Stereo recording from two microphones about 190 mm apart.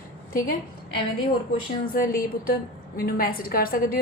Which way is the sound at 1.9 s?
50° left (ahead or behind).